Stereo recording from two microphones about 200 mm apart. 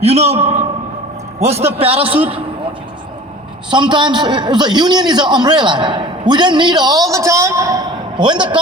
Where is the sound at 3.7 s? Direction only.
25° right (ahead or behind).